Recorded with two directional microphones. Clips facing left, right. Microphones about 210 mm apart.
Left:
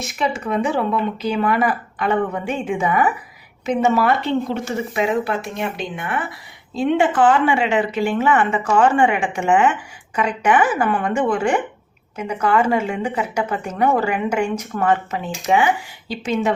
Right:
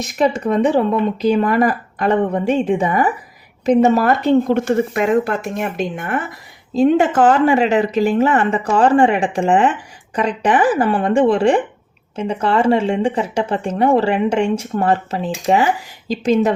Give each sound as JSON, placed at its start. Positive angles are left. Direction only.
{"t": 0.0, "sound": "speech", "side_deg": -40}